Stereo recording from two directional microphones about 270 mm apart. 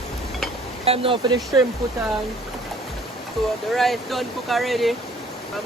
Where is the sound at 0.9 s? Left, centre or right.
Centre.